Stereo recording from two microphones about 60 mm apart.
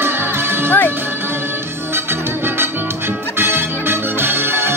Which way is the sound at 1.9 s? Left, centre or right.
Right.